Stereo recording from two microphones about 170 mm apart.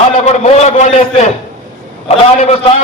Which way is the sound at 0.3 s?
40° left (ahead or behind).